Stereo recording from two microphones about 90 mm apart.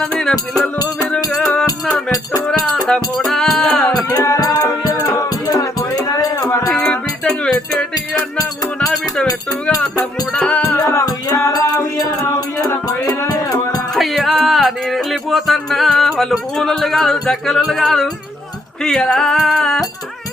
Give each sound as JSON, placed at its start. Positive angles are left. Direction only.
{"t": 0.0, "sound": "music", "side_deg": 5}
{"t": 4.2, "sound": "music", "side_deg": 40}
{"t": 6.1, "sound": "a sound", "side_deg": 40}
{"t": 6.7, "sound": "music", "side_deg": 10}
{"t": 7.9, "sound": "music", "side_deg": 45}
{"t": 10.3, "sound": "music", "side_deg": 10}
{"t": 10.8, "sound": "music", "side_deg": 30}
{"t": 13.1, "sound": "music", "side_deg": 40}
{"t": 13.9, "sound": "music", "side_deg": 0}